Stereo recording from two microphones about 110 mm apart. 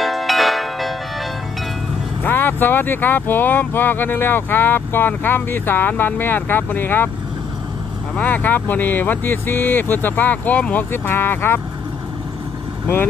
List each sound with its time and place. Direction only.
0.0 s music: centre (ahead or behind)
2.2 s speech: 20° left (ahead or behind)
8.2 s speech: 15° left (ahead or behind)